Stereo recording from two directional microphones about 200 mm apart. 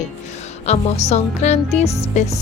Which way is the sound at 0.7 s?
30° left (ahead or behind).